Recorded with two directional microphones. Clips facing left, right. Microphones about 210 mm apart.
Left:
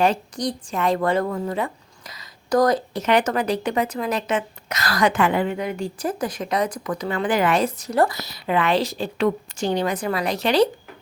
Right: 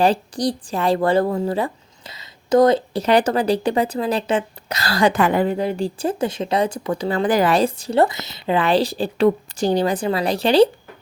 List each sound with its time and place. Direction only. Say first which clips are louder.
0.0 s a woman's voice: right 3 dB; 35° right (ahead or behind)